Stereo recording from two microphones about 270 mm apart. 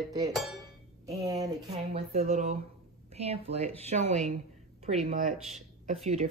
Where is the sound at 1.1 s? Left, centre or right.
Centre.